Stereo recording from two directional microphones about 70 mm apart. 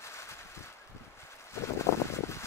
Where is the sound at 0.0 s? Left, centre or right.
Left.